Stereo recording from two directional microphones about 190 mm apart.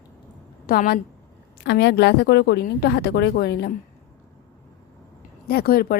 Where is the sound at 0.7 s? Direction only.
50° left (ahead or behind).